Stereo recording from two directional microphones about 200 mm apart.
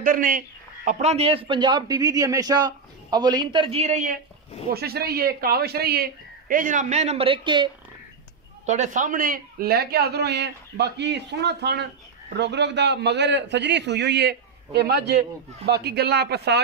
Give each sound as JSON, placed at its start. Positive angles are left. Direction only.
{"t": 0.0, "sound": "a man's voice", "side_deg": -45}
{"t": 0.8, "sound": "a man's voice", "side_deg": -30}
{"t": 4.7, "sound": "a man's voice", "side_deg": -50}
{"t": 8.6, "sound": "a man's voice", "side_deg": -35}